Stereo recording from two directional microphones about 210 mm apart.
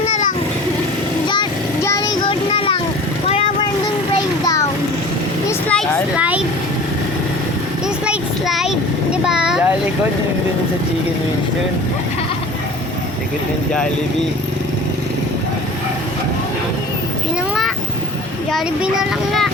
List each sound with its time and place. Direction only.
0.1 s vehicle: 40° left (ahead or behind)
1.3 s a sound: 20° left (ahead or behind)
5.5 s vehicle: 5° left (ahead or behind)
6.1 s vehicle: 5° right (ahead or behind)
8.0 s child singing: 5° right (ahead or behind)
9.2 s a sound: 5° right (ahead or behind)
18.5 s a child's voice: centre (ahead or behind)